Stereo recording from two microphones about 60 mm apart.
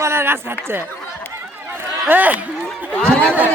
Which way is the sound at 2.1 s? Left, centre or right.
Right.